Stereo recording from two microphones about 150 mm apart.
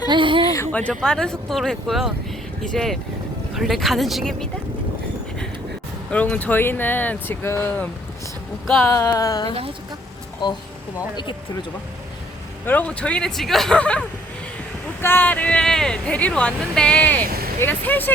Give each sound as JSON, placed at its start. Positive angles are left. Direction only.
{"t": 0.1, "sound": "a sound", "side_deg": -35}
{"t": 0.5, "sound": "speech", "side_deg": 15}
{"t": 6.1, "sound": "speech", "side_deg": 10}
{"t": 8.9, "sound": "a sound", "side_deg": 20}
{"t": 12.6, "sound": "speech", "side_deg": 10}
{"t": 15.0, "sound": "speech", "side_deg": 15}